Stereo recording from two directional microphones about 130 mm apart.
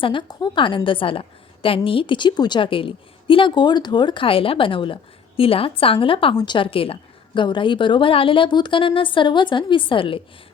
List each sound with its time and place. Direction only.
0.0 s a woman's voice: 40° left (ahead or behind)